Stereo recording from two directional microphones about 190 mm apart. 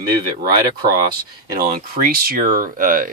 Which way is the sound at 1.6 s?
50° right (ahead or behind).